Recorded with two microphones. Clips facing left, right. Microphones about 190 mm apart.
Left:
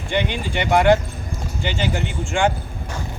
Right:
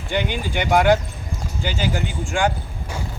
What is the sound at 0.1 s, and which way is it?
Speech, 5° right (ahead or behind).